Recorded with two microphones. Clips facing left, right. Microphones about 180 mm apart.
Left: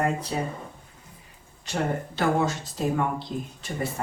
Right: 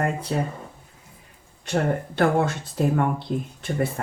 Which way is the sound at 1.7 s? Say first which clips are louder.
Right 4 dB; 55° right (ahead or behind).